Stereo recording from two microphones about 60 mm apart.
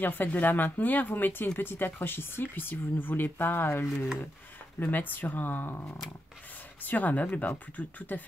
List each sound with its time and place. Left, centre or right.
0.0 s speech: left